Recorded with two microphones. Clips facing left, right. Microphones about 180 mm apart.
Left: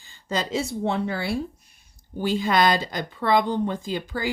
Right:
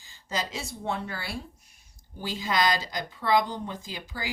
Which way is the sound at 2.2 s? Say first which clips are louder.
Left 6 dB; 60° left (ahead or behind).